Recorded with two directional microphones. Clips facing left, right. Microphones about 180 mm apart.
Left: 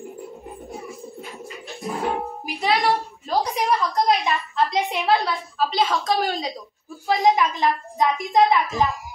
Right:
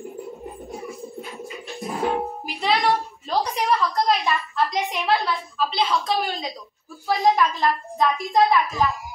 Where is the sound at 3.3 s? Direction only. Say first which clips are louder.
Left 1 dB; 10° left (ahead or behind); by 5.3 s 25° left (ahead or behind).